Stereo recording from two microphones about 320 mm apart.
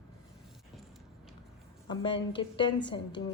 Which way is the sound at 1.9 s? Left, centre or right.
Centre.